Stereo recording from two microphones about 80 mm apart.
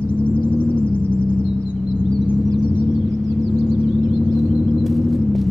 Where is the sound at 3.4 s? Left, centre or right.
Centre.